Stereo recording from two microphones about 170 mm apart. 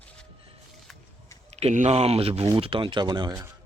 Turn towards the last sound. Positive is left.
turn(degrees=-25)  # may be behind; listen again after turning